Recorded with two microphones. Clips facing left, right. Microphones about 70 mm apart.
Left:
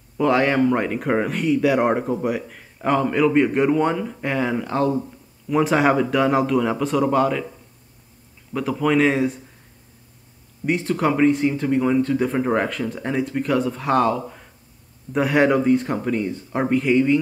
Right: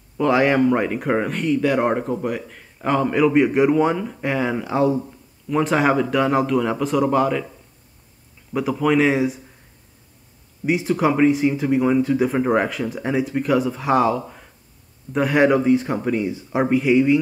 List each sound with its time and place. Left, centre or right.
0.2 s speech: centre
8.5 s speech: centre
10.6 s speech: centre